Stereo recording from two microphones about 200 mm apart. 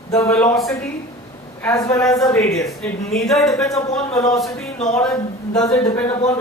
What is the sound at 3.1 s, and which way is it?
Speech, centre (ahead or behind).